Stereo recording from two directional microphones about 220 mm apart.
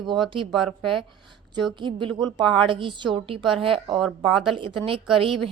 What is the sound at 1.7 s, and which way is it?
A woman's voice, 20° right (ahead or behind).